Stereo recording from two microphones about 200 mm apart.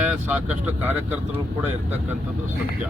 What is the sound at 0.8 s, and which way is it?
Speech, 10° right (ahead or behind).